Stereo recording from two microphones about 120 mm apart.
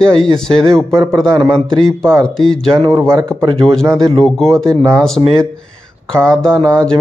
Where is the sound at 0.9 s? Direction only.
30° right (ahead or behind).